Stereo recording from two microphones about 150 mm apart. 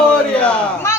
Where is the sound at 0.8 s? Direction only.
20° left (ahead or behind).